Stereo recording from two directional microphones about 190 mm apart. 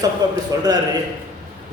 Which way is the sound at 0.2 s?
20° right (ahead or behind).